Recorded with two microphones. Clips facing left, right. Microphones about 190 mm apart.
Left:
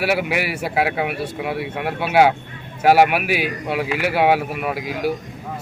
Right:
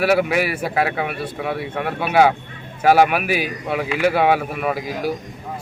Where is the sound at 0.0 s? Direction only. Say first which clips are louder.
Right 3 dB; 5° left (ahead or behind).